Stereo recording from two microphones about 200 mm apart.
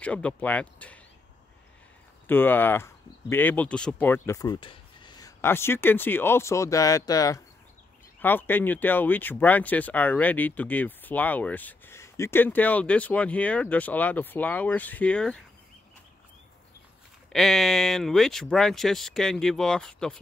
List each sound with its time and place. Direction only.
0.0 s speech: 5° left (ahead or behind)
2.2 s speech: 10° left (ahead or behind)
17.3 s speech: centre (ahead or behind)